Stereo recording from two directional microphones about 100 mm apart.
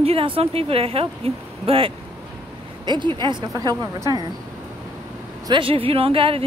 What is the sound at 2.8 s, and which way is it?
Speech, 50° right (ahead or behind).